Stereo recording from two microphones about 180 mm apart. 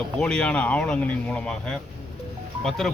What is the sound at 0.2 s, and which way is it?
Speech, 5° left (ahead or behind).